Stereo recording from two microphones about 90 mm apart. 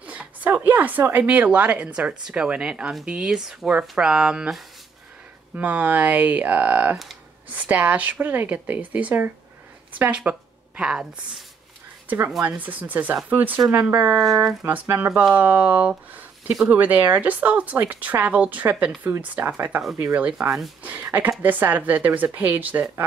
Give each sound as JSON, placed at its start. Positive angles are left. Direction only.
{"t": 0.0, "sound": "speech", "side_deg": -15}
{"t": 5.6, "sound": "speech", "side_deg": -15}